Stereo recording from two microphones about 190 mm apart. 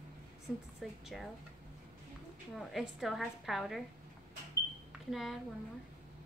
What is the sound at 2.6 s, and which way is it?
A woman's voice, centre (ahead or behind).